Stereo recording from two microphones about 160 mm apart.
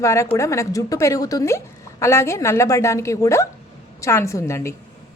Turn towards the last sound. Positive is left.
turn(degrees=15)  # may be behind; listen again after turning